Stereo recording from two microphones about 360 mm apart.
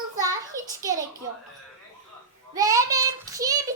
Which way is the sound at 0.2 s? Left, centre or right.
Centre.